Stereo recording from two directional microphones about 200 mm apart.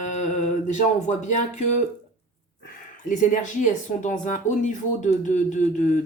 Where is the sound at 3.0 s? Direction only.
40° left (ahead or behind).